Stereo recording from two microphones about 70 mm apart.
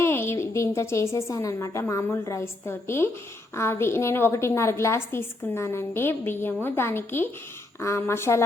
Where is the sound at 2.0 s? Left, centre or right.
Left.